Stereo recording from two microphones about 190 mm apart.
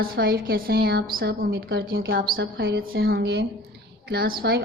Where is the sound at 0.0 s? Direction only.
50° right (ahead or behind).